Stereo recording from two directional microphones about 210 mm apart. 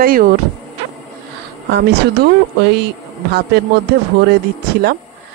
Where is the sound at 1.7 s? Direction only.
55° right (ahead or behind).